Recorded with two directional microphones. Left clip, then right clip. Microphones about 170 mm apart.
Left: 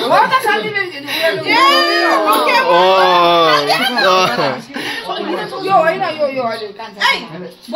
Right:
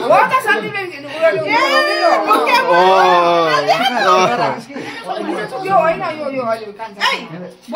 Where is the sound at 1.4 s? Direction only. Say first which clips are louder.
Left 3 dB; 55° right (ahead or behind); by 2.6 s 80° right.